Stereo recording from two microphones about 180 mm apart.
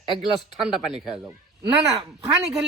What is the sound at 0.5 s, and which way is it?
Speech, 5° right (ahead or behind).